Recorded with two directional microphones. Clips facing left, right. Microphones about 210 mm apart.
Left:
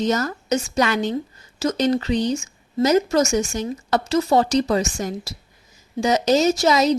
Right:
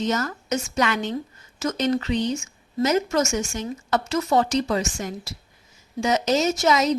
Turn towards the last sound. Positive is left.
turn(degrees=35)  # may be behind; listen again after turning